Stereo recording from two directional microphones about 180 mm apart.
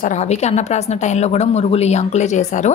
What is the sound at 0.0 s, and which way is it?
Speech, 40° left (ahead or behind).